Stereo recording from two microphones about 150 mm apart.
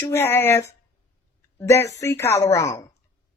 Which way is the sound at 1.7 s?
20° left (ahead or behind).